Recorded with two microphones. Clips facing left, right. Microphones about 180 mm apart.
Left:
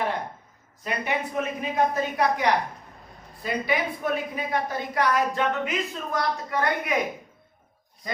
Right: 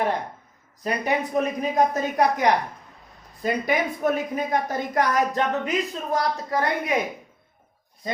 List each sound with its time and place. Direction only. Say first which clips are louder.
0.9 s a woman's voice: right 4 dB; 40° right (ahead or behind)